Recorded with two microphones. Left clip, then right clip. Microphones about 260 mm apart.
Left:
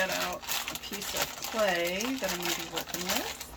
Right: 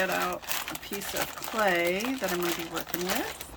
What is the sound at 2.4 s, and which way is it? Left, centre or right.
Speech, centre.